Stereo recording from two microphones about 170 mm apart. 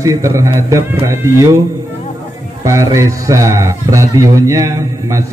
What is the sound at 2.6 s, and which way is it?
A man's voice, 15° right (ahead or behind).